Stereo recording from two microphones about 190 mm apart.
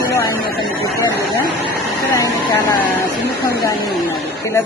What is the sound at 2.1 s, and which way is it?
Speech, 15° left (ahead or behind).